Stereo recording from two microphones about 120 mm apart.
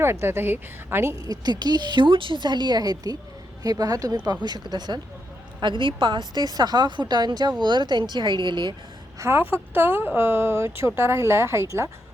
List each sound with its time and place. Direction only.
0.0 s speech: 20° right (ahead or behind)
1.1 s a woman's voice: 35° right (ahead or behind)
9.1 s speech: 20° right (ahead or behind)